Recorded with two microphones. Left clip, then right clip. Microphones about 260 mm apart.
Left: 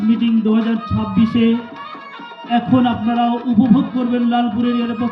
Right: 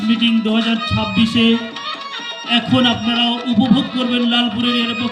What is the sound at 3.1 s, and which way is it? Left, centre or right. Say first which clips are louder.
Speech: even; left.